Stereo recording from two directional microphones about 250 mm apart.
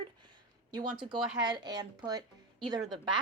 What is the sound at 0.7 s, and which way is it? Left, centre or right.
Speech, centre.